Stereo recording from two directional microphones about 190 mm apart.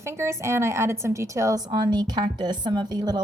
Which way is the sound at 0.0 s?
15° right (ahead or behind).